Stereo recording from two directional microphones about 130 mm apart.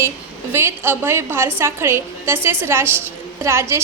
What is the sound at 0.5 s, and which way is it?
A woman's voice, 20° right (ahead or behind).